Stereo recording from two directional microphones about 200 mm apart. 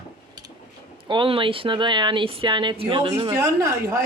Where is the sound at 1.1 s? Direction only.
25° right (ahead or behind).